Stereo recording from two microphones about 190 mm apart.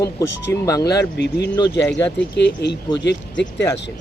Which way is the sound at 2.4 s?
65° left (ahead or behind).